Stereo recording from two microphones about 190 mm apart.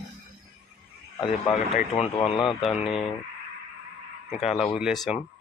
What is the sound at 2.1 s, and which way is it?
Speech, 30° left (ahead or behind).